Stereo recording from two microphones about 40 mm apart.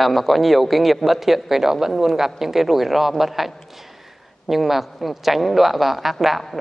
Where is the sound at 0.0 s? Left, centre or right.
Centre.